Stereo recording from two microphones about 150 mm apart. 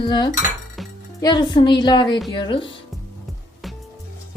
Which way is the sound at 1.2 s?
30° left (ahead or behind).